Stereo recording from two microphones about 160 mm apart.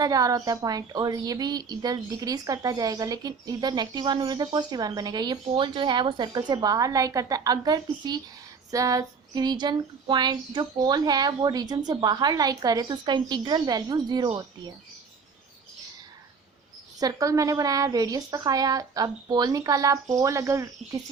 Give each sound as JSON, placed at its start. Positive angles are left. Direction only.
{"t": 0.0, "sound": "a woman's voice", "side_deg": -20}
{"t": 17.0, "sound": "a woman's voice", "side_deg": -20}